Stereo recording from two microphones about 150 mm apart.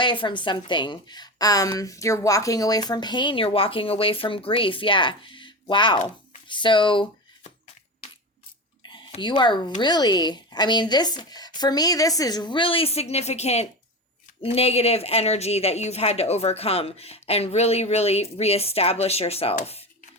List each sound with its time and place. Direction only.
0.0 s a woman's voice: 30° left (ahead or behind)
8.8 s speech: 30° left (ahead or behind)